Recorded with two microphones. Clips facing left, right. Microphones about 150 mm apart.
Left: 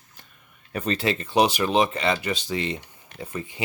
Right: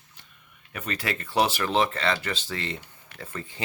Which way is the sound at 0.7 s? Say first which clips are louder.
Left 7 dB; 30° left (ahead or behind).